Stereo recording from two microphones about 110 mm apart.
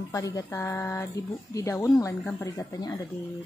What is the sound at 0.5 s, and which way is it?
Speech, 20° left (ahead or behind).